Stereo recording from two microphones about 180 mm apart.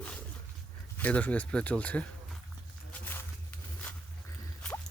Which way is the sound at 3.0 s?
10° left (ahead or behind).